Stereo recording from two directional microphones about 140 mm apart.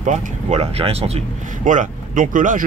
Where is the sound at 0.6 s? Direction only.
45° right (ahead or behind).